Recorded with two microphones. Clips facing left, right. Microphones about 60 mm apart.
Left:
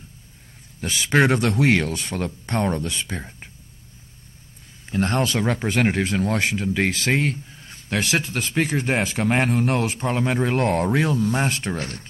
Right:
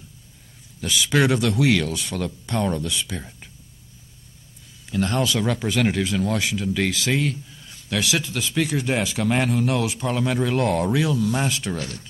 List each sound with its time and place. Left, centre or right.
0.7 s speech: left
4.8 s speech: left